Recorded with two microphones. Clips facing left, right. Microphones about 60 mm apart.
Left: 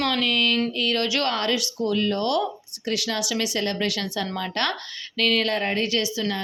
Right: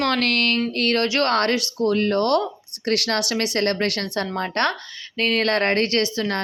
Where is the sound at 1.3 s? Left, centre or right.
Right.